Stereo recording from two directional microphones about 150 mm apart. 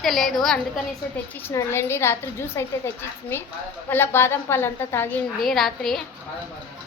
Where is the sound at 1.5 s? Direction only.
15° left (ahead or behind).